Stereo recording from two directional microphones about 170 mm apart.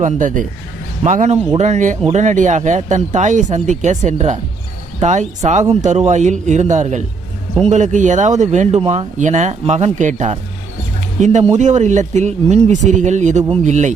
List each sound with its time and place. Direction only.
0.0 s speech: 50° right (ahead or behind)